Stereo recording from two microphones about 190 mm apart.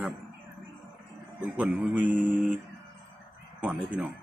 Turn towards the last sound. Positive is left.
turn(degrees=-5)  # may be behind; listen again after turning